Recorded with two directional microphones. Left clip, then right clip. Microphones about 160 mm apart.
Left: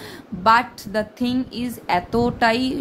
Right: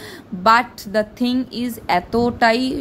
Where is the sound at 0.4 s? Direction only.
20° right (ahead or behind).